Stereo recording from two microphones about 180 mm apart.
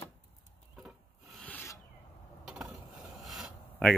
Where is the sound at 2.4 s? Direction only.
Centre (ahead or behind).